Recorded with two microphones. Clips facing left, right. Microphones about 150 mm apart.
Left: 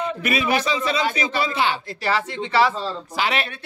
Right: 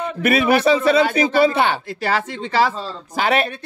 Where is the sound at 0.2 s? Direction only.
55° right (ahead or behind).